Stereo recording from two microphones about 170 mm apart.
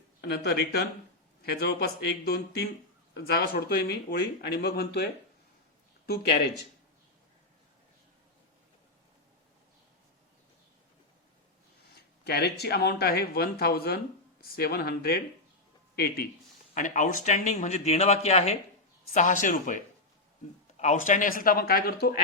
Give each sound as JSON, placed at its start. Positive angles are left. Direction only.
{"t": 0.2, "sound": "speech", "side_deg": 70}
{"t": 12.2, "sound": "speech", "side_deg": 70}
{"t": 16.7, "sound": "a man's voice", "side_deg": 50}
{"t": 19.1, "sound": "a man's voice", "side_deg": 50}